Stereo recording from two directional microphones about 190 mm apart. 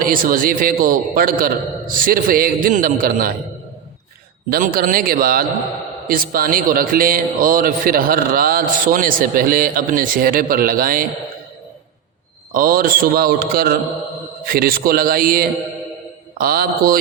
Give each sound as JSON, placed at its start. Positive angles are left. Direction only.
{"t": 0.0, "sound": "a man's voice", "side_deg": -50}
{"t": 4.4, "sound": "a man's voice", "side_deg": -50}
{"t": 12.5, "sound": "a man's voice", "side_deg": -50}